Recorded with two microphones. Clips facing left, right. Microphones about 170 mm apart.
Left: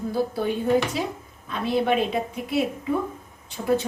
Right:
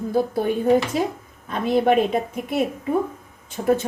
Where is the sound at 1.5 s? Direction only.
45° right (ahead or behind).